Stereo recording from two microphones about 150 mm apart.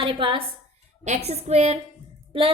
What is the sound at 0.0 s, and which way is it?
A woman's voice, 40° right (ahead or behind).